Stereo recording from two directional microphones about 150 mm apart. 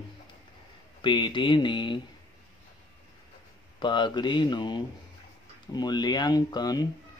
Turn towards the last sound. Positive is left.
turn(degrees=25)  # may be behind; listen again after turning